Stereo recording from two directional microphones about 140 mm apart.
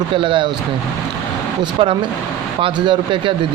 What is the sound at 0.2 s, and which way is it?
Speech, 35° right (ahead or behind).